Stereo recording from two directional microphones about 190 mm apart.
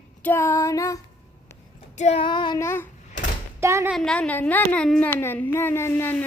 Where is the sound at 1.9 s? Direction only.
35° left (ahead or behind); by 2.9 s 15° left (ahead or behind).